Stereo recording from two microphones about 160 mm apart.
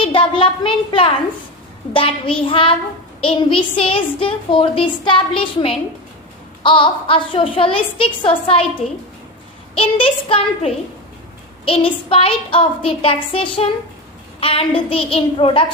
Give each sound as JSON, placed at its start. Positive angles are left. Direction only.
{"t": 0.0, "sound": "a woman's voice", "side_deg": 35}